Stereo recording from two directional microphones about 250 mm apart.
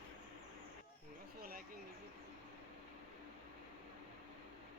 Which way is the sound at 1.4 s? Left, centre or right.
Right.